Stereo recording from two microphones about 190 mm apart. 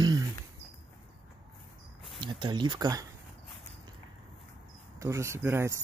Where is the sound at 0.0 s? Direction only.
20° right (ahead or behind).